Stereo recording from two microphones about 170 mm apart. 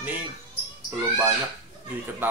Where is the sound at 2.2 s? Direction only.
10° right (ahead or behind).